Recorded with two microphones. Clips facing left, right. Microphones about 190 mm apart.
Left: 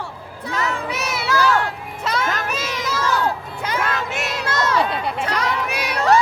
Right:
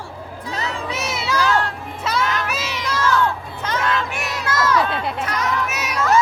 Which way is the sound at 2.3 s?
45° left (ahead or behind).